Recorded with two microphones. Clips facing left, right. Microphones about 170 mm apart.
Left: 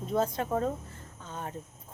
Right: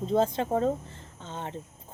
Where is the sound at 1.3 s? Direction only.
25° right (ahead or behind).